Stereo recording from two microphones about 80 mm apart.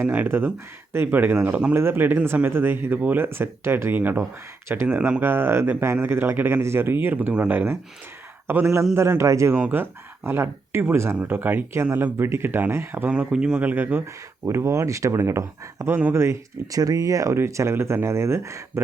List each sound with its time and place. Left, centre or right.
0.3 s speech: right
5.2 s speech: right
9.6 s speech: right
13.1 s speech: centre
13.7 s speech: right
14.4 s speech: right
16.7 s speech: right